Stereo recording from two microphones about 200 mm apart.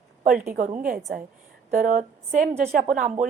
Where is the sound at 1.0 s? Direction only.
Centre (ahead or behind).